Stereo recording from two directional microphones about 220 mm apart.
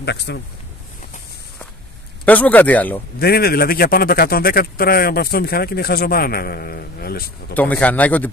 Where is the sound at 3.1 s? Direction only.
45° left (ahead or behind).